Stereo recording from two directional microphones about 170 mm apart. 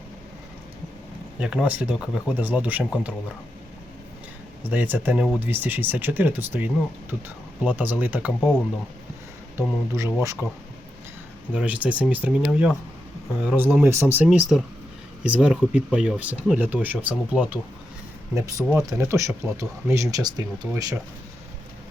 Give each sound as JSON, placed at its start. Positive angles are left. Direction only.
{"t": 1.4, "sound": "speech", "side_deg": -5}
{"t": 4.7, "sound": "speech", "side_deg": -10}
{"t": 9.6, "sound": "speech", "side_deg": -15}
{"t": 11.5, "sound": "speech", "side_deg": -10}
{"t": 18.3, "sound": "speech", "side_deg": -20}